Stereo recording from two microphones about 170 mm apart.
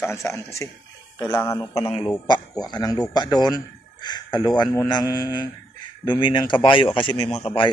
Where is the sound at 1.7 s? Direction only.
35° left (ahead or behind).